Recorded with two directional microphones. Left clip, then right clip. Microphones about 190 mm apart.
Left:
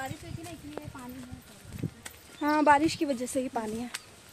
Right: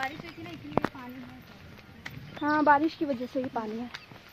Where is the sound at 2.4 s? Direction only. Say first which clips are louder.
Even; 10° left (ahead or behind).